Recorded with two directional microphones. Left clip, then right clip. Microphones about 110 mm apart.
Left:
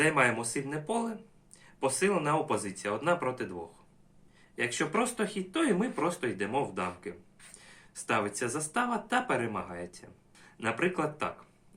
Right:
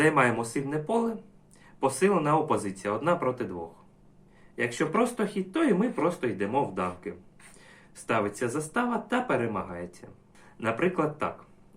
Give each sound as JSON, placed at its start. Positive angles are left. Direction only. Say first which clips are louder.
{"t": 0.0, "sound": "speech", "louder": "right 3 dB", "side_deg": 0}